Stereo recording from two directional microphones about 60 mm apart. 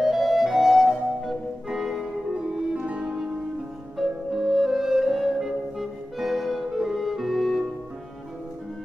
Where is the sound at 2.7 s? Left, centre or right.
Centre.